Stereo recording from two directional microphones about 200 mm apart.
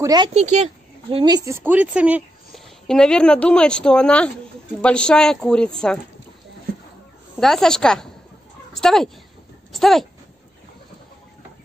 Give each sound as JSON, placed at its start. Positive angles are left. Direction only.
{"t": 0.0, "sound": "speech", "side_deg": -20}
{"t": 0.3, "sound": "speech", "side_deg": -35}
{"t": 1.1, "sound": "a woman's voice", "side_deg": -20}
{"t": 7.3, "sound": "a woman's voice", "side_deg": 0}